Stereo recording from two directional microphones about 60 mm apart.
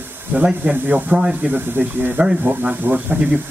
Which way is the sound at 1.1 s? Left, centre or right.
Centre.